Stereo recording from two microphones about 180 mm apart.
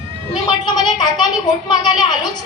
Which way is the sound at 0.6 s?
25° left (ahead or behind).